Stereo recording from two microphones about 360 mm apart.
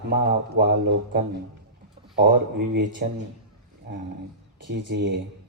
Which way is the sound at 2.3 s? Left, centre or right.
Right.